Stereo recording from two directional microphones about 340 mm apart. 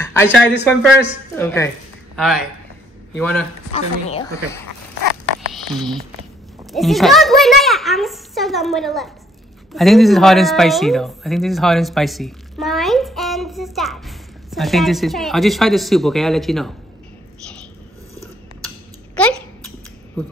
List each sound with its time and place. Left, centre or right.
0.0 s a woman's voice: centre
3.7 s a woman's voice: centre
5.5 s a child's voice: centre
19.1 s a sound: centre